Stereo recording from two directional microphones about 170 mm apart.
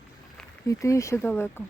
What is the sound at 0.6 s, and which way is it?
Speech, 20° left (ahead or behind).